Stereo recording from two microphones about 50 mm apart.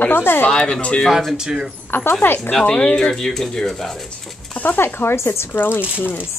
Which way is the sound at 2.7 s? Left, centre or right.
Left.